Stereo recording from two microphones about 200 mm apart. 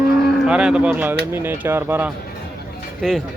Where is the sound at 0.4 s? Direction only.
5° right (ahead or behind).